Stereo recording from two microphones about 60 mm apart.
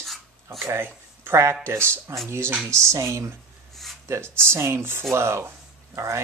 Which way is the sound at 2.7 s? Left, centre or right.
Right.